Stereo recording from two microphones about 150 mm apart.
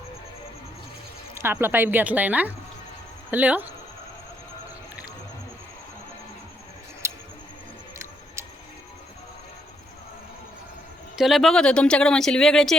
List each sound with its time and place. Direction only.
1.4 s speech: 15° right (ahead or behind)
7.0 s tick: 20° right (ahead or behind)
11.2 s speech: centre (ahead or behind)